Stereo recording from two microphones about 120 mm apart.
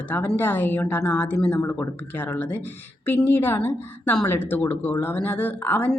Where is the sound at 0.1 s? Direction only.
15° left (ahead or behind).